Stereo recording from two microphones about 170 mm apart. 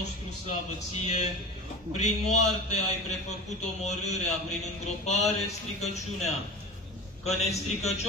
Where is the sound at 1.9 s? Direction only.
40° left (ahead or behind).